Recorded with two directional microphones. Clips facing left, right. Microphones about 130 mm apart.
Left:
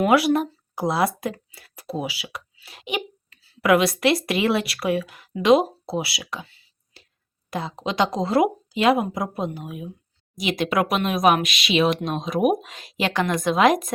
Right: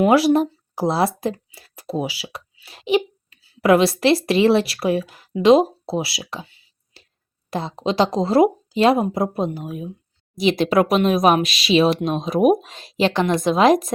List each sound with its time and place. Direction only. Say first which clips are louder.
0.0 s speech: right 3 dB; 25° right (ahead or behind)